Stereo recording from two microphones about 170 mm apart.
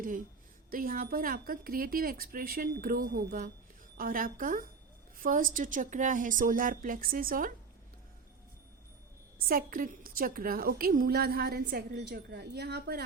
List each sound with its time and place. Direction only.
0.7 s a woman's voice: 55° right (ahead or behind)
9.5 s a woman's voice: 55° right (ahead or behind); by 13.0 s 70° right (ahead or behind)